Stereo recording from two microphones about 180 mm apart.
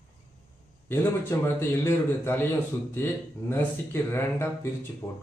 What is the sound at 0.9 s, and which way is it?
Speech, 15° left (ahead or behind).